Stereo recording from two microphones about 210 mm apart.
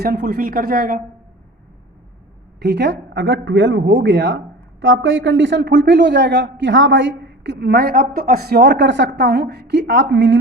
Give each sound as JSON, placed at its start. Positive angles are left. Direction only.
{"t": 0.0, "sound": "a woman's voice", "side_deg": -45}
{"t": 2.6, "sound": "speech", "side_deg": -55}